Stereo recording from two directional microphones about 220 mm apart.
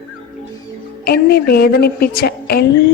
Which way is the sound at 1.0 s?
45° left (ahead or behind).